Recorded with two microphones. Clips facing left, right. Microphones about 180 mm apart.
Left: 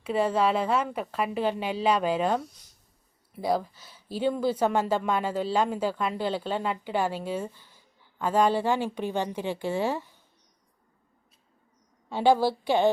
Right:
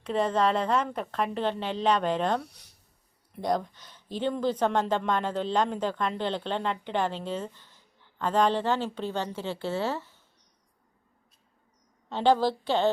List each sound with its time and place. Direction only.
0.0 s speech: 10° left (ahead or behind)
2.4 s speech: 65° right (ahead or behind)
3.3 s speech: 5° left (ahead or behind)
12.0 s speech: 10° left (ahead or behind)